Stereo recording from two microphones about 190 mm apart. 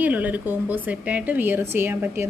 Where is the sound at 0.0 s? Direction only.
10° right (ahead or behind).